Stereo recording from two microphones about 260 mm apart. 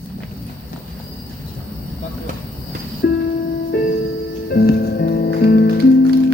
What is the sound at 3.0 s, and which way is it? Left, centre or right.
Music, left.